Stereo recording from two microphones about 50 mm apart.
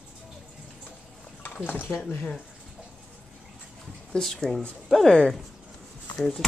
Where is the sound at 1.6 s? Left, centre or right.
Left.